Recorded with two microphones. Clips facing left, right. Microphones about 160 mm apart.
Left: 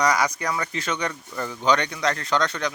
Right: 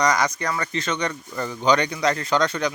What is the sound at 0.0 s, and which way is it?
Speech, 5° left (ahead or behind).